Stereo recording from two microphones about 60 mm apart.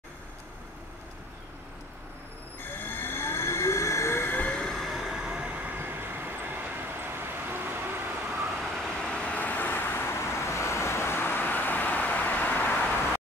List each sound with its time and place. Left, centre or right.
2.8 s train: left
4.4 s train: centre
4.6 s train: centre; by 5.8 s right
5.8 s vehicle: right
8.5 s vehicle: centre; by 12.9 s left